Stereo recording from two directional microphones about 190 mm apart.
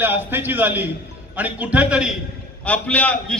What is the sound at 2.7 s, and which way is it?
Speech, 5° left (ahead or behind).